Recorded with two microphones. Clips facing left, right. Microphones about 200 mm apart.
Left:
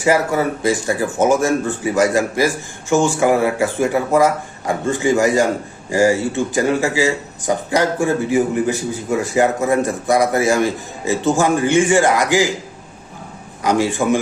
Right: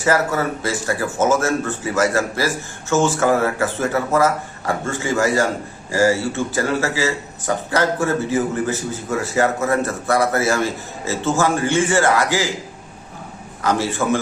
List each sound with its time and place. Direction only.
0.0 s speech: 15° left (ahead or behind)
13.6 s speech: 15° left (ahead or behind)